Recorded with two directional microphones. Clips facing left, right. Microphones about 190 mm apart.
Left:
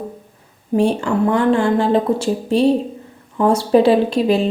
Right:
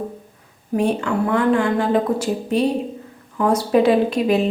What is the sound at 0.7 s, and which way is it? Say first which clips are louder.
A woman's voice: left 3 dB; 30° left (ahead or behind).